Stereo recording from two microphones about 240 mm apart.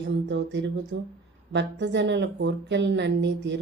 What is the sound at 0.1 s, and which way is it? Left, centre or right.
A woman's voice, right.